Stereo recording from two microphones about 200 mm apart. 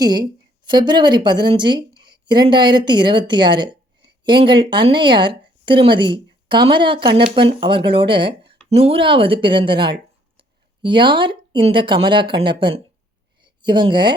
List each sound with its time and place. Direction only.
0.0 s speech: 20° right (ahead or behind)